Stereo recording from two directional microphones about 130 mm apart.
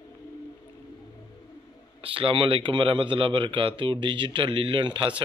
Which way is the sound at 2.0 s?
45° right (ahead or behind).